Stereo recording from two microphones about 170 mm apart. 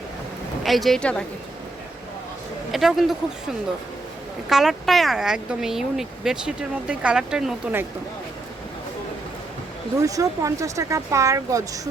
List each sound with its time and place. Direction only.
0.6 s speech: centre (ahead or behind)
2.7 s speech: centre (ahead or behind)
4.4 s speech: centre (ahead or behind)
10.0 s speech: 20° right (ahead or behind)